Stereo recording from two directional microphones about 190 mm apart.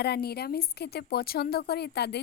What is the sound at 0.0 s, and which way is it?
Speech, 55° left (ahead or behind).